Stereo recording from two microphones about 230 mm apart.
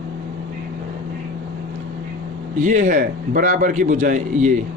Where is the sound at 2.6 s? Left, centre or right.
Right.